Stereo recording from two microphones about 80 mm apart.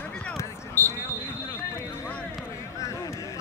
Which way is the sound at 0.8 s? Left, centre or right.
Left.